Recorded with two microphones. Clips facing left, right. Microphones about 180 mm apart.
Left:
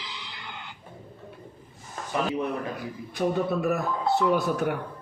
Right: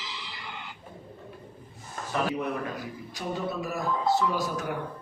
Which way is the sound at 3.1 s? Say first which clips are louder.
Left 7 dB; 60° left (ahead or behind).